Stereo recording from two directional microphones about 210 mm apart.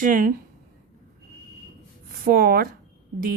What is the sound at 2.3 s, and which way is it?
Speech, 45° right (ahead or behind).